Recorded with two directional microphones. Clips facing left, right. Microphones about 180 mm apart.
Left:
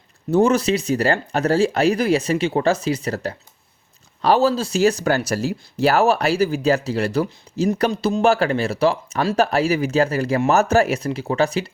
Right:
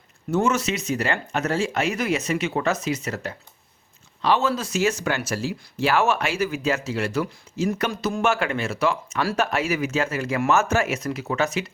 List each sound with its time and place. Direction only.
0.3 s speech: 35° left (ahead or behind)